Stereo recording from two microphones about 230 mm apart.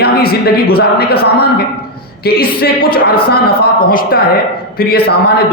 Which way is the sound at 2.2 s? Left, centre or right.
Left.